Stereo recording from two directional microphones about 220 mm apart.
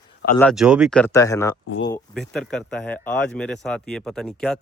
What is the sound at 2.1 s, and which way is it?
Speech, 5° left (ahead or behind).